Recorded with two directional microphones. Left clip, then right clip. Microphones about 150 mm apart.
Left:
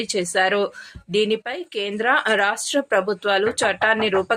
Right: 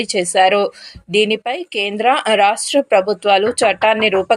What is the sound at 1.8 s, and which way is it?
A woman's voice, 15° right (ahead or behind).